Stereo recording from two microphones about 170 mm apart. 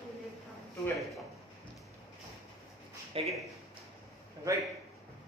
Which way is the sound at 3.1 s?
35° right (ahead or behind).